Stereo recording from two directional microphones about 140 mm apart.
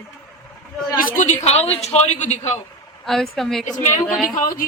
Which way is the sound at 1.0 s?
75° left (ahead or behind).